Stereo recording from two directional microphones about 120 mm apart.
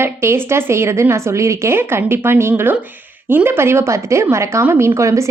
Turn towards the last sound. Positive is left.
turn(degrees=-25)  # may be behind; listen again after turning